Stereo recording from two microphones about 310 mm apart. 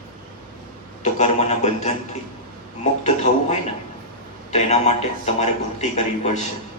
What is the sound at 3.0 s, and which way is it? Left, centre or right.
A man's voice, left.